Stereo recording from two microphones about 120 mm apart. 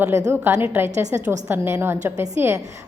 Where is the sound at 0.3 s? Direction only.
20° right (ahead or behind).